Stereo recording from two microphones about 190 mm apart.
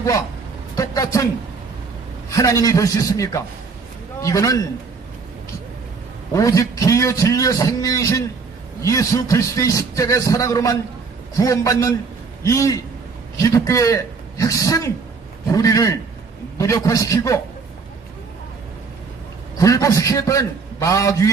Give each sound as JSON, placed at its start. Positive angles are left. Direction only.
{"t": 0.7, "sound": "a man's voice", "side_deg": 15}
{"t": 6.3, "sound": "a man's voice", "side_deg": 15}
{"t": 19.6, "sound": "a man's voice", "side_deg": 15}